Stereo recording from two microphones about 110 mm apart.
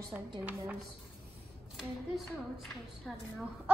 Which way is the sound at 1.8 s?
Centre (ahead or behind).